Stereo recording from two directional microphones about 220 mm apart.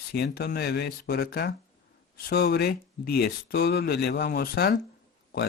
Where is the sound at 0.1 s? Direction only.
45° left (ahead or behind).